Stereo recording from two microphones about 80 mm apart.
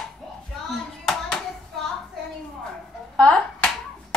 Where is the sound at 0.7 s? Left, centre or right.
Centre.